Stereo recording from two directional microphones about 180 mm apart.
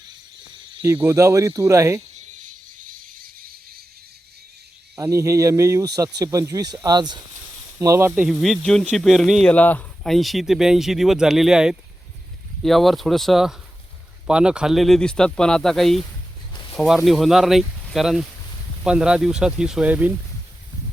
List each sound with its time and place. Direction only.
1.0 s speech: 15° right (ahead or behind)
2.1 s a sound: 45° right (ahead or behind)
4.9 s speech: 15° right (ahead or behind)